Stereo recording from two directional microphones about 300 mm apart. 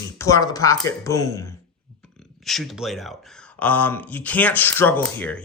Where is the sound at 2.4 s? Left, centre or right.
Centre.